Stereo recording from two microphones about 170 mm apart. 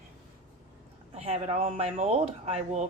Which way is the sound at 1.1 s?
40° right (ahead or behind).